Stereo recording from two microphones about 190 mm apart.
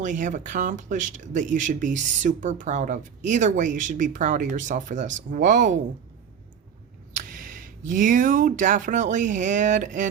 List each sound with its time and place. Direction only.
0.0 s speech: 40° right (ahead or behind)
7.1 s speech: 45° right (ahead or behind)